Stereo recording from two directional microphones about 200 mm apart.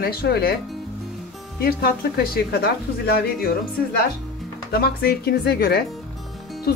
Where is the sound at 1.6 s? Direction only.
50° left (ahead or behind).